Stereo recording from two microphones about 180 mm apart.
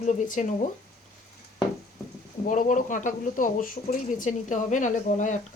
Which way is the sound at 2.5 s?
45° left (ahead or behind).